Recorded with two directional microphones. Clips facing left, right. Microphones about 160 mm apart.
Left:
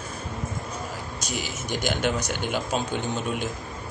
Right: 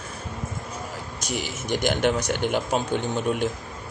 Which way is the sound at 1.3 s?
55° right (ahead or behind).